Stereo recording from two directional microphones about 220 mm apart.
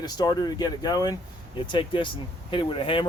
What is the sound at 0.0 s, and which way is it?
Speech, 20° left (ahead or behind).